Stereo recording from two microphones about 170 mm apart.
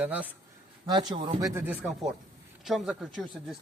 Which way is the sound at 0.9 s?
25° right (ahead or behind).